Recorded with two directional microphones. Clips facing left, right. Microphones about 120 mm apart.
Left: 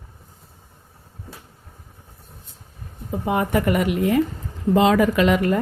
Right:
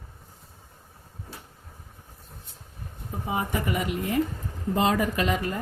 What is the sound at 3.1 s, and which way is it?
A woman's voice, 70° left (ahead or behind).